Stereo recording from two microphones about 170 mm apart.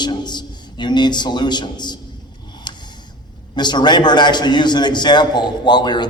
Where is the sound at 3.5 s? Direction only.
25° left (ahead or behind).